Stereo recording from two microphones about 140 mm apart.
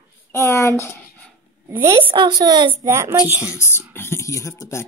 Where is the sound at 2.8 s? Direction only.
20° right (ahead or behind).